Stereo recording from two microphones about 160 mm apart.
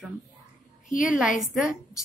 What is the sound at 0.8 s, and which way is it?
Speech, 55° left (ahead or behind).